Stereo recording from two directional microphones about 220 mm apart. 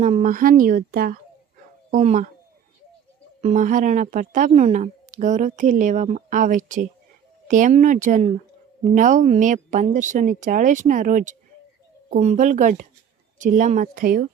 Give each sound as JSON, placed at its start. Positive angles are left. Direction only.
{"t": 0.0, "sound": "a woman's voice", "side_deg": -35}
{"t": 3.4, "sound": "a woman's voice", "side_deg": -35}